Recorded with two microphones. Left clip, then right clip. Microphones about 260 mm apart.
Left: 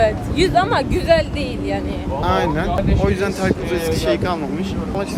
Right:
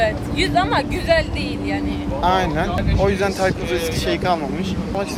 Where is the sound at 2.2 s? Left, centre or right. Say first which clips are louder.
Right 1 dB; centre.